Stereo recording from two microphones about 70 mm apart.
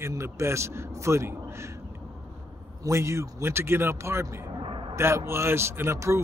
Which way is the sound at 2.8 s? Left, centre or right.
Right.